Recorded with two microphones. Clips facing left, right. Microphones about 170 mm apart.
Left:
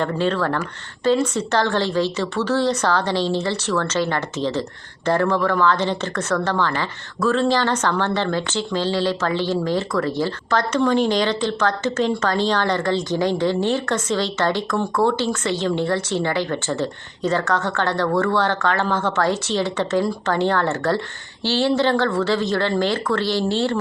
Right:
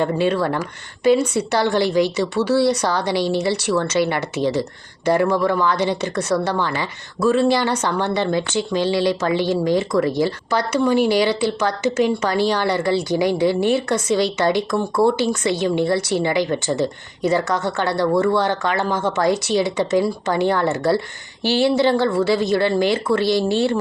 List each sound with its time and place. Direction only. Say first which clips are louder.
0.0 s speech: right 2 dB; 15° right (ahead or behind)